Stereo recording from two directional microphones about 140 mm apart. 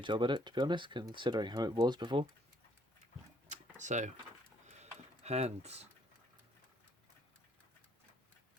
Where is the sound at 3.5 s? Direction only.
60° right (ahead or behind).